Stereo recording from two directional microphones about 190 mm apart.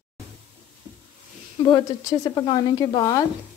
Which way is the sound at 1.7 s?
20° left (ahead or behind).